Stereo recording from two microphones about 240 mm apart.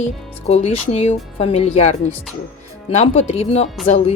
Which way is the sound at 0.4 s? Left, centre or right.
Left.